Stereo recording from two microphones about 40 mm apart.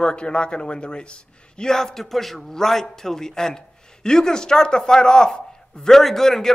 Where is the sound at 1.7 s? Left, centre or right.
Centre.